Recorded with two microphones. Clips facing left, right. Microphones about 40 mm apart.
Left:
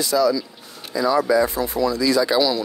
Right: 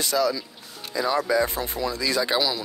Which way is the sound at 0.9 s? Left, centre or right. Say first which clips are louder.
Left 5 dB; left.